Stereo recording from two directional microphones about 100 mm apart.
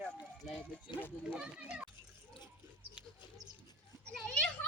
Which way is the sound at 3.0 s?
10° right (ahead or behind).